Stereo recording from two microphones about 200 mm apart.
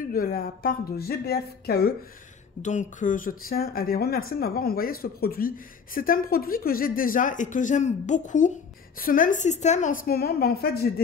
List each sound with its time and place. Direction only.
0.1 s speech: 45° left (ahead or behind)
2.6 s speech: 35° left (ahead or behind)